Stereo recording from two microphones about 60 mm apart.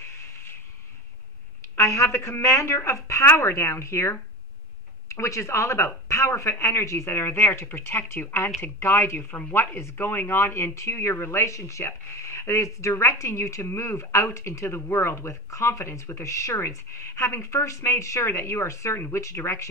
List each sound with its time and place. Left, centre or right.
1.8 s a woman's voice: left
18.9 s a woman's voice: left